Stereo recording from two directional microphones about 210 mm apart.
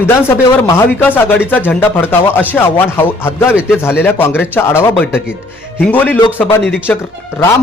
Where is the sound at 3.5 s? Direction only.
5° right (ahead or behind).